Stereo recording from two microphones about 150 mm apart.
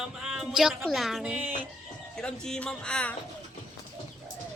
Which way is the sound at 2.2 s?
5° left (ahead or behind).